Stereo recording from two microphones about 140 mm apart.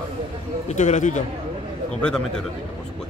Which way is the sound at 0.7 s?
55° left (ahead or behind).